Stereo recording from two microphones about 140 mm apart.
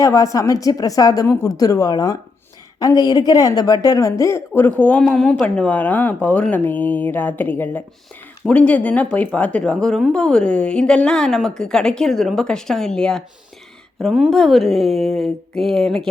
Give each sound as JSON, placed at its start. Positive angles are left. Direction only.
{"t": 0.0, "sound": "a woman's voice", "side_deg": 25}